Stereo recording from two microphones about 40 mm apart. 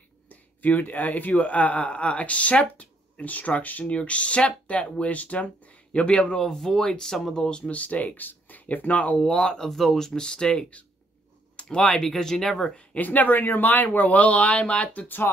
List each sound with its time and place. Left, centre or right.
0.3 s speech: left
1.3 s speech: left
6.3 s speech: centre
7.7 s speech: left
9.2 s speech: centre
11.5 s a sound: left
11.9 s speech: centre
12.9 s speech: left